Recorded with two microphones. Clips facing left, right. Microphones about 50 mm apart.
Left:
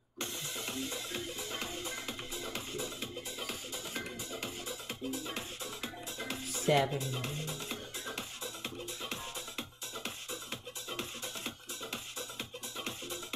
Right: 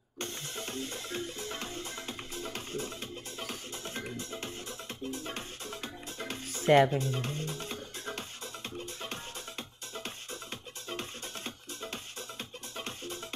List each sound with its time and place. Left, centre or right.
0.2 s music: right